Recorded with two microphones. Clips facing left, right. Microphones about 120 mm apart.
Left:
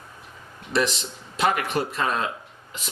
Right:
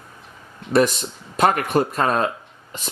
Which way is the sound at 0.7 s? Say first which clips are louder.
Right 7 dB; 50° right (ahead or behind).